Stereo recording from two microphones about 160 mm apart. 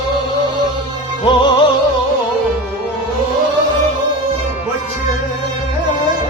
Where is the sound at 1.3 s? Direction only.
30° left (ahead or behind).